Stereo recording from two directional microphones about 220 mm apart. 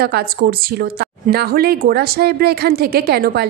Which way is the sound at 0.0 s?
45° right (ahead or behind).